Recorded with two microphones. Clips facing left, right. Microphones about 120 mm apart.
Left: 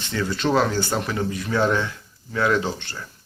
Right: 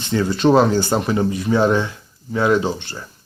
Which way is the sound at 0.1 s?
20° right (ahead or behind).